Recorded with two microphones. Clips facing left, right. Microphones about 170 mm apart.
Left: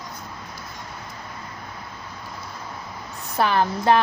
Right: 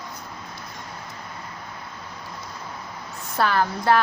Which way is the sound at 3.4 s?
20° left (ahead or behind).